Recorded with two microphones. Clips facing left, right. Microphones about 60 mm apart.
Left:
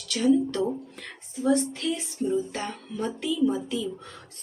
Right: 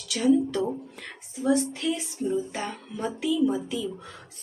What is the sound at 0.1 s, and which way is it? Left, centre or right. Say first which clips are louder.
A woman's voice: even; centre.